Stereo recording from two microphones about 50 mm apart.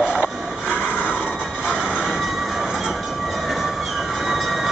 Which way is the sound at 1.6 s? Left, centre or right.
Centre.